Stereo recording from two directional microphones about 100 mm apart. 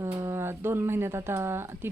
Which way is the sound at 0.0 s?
30° right (ahead or behind).